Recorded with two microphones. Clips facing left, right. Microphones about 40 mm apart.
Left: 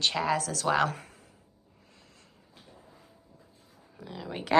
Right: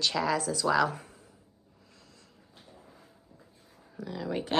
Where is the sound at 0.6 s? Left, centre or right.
Left.